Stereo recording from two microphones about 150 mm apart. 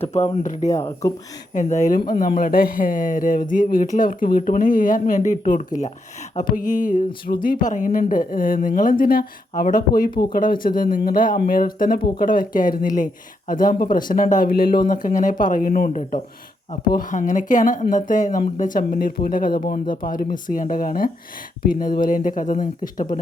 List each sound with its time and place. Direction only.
0.0 s speech: 45° left (ahead or behind)
0.7 s speech: 20° left (ahead or behind)
1.5 s speech: 55° left (ahead or behind)
2.0 s speech: 65° left (ahead or behind)
10.1 s speech: 35° left (ahead or behind)
10.3 s speech: 70° left (ahead or behind)
14.8 s speech: 60° left (ahead or behind)